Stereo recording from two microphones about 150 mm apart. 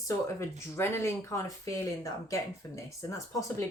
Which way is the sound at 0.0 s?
15° left (ahead or behind).